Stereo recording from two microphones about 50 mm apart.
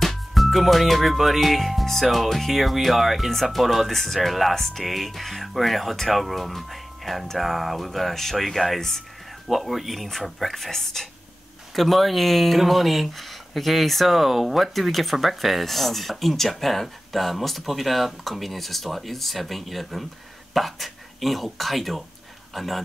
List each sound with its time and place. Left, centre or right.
0.0 s speech: centre